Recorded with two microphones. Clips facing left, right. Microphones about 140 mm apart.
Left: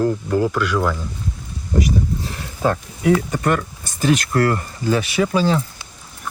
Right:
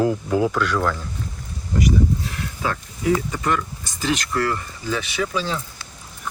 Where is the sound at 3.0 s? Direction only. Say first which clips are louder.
Left 3 dB; 60° left (ahead or behind); by 5.6 s 40° left (ahead or behind).